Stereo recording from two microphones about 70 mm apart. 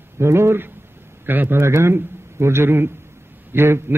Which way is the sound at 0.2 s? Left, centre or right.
Right.